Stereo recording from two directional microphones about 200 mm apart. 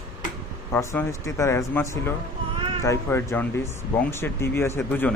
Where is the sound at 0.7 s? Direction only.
10° left (ahead or behind).